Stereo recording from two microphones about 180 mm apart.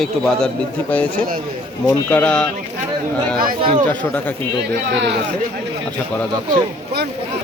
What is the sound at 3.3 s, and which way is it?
Speech, 55° right (ahead or behind).